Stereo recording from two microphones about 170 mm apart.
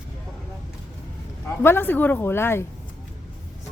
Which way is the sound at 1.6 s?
15° left (ahead or behind).